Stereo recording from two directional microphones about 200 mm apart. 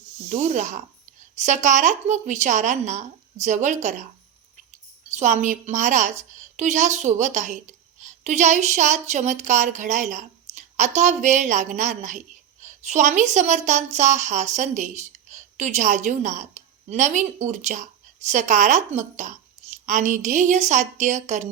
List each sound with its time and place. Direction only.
0.3 s a woman's voice: 35° right (ahead or behind)
5.0 s a woman's voice: 35° right (ahead or behind)